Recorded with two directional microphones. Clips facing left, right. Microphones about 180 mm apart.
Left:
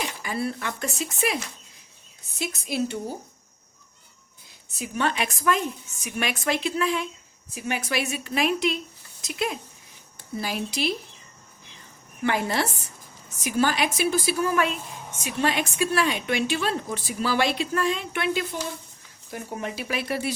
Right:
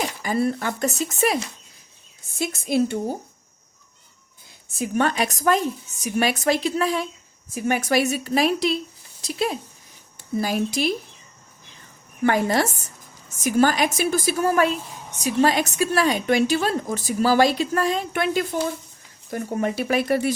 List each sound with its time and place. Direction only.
0.2 s a woman's voice: 40° right (ahead or behind)
2.4 s a woman's voice: 50° right (ahead or behind)
4.7 s a woman's voice: 45° right (ahead or behind)
10.4 s a woman's voice: 45° right (ahead or behind)
12.2 s a woman's voice: 45° right (ahead or behind)